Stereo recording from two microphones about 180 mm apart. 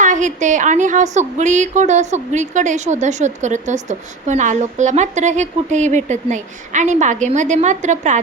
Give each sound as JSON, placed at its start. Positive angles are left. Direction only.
{"t": 0.0, "sound": "a woman's voice", "side_deg": -45}